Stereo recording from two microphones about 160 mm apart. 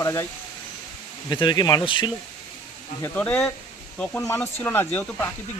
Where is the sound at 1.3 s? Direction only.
25° left (ahead or behind).